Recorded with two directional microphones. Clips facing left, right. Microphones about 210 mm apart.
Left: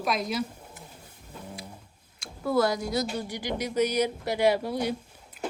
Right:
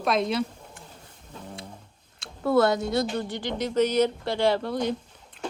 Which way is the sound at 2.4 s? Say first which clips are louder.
Right 3 dB; 60° right (ahead or behind).